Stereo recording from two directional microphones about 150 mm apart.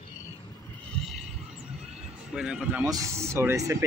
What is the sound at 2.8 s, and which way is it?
Speech, 20° right (ahead or behind).